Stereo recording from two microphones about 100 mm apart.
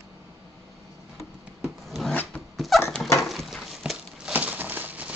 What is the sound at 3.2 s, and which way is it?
Horse, centre (ahead or behind).